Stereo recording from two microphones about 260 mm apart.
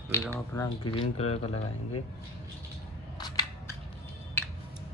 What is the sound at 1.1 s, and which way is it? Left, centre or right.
Speech, left.